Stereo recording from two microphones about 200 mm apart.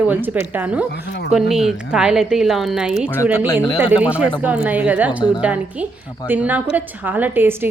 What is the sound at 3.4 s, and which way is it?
Speech, 20° left (ahead or behind).